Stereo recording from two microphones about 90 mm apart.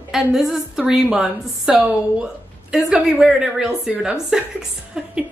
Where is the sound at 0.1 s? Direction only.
5° right (ahead or behind).